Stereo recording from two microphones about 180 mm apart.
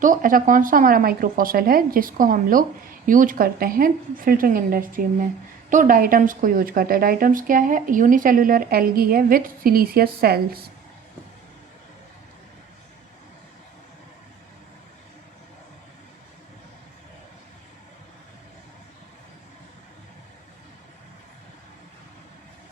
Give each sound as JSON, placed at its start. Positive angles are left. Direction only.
{"t": 0.0, "sound": "a woman's voice", "side_deg": -50}